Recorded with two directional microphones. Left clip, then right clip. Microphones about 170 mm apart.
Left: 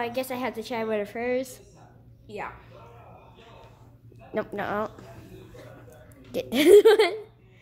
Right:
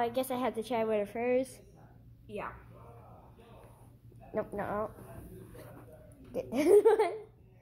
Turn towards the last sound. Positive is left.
turn(degrees=30)  # may be behind; listen again after turning